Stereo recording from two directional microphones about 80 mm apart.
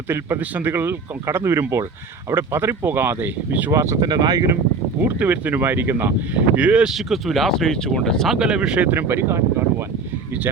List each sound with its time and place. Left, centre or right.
0.1 s speech: right
3.7 s speech: right
4.0 s speech: right
5.0 s speech: right
6.6 s speech: centre
6.9 s speech: centre
8.4 s speech: centre; by 9.4 s right